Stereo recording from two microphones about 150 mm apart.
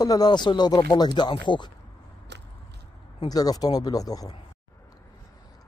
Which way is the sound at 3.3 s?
25° left (ahead or behind).